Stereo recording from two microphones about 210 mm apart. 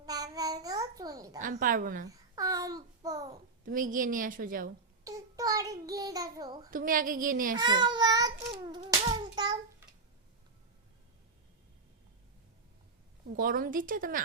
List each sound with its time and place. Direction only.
0.0 s babbling: 15° right (ahead or behind)
1.4 s a woman's voice: 40° right (ahead or behind)
2.0 s babbling: 15° right (ahead or behind)
3.7 s a woman's voice: 40° right (ahead or behind)
5.0 s child singing: 15° right (ahead or behind)
6.7 s a woman's voice: 40° right (ahead or behind)
7.5 s a child's voice: 20° right (ahead or behind)
8.7 s child singing: 20° right (ahead or behind)
13.2 s a woman's voice: 40° right (ahead or behind)